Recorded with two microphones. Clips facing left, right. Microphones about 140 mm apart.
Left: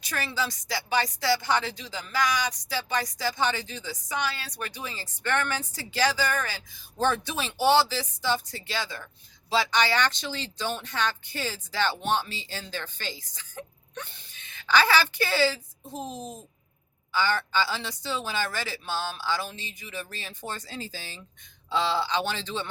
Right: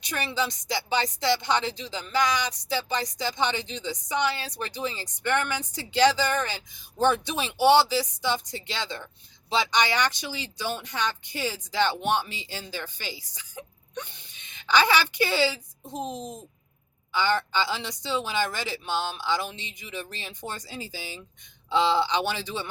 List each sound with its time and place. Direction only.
0.0 s speech: 20° right (ahead or behind)